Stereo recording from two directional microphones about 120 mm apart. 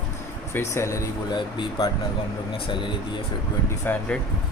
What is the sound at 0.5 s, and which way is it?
Speech, 25° left (ahead or behind).